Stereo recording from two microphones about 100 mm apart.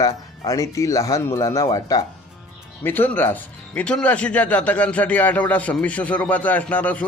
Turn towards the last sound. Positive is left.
turn(degrees=15)  # may be behind; listen again after turning